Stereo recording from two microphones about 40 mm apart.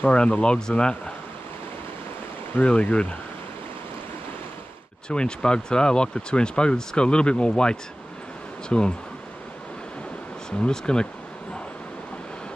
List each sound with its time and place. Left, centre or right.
0.0 s speech: left
2.6 s speech: left
5.1 s speech: left
10.7 s speech: left